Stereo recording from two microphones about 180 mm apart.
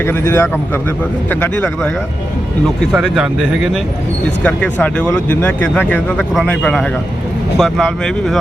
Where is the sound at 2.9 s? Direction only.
Centre (ahead or behind).